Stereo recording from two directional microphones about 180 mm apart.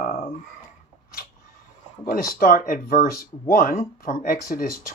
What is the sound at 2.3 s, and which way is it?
Speech, 50° left (ahead or behind).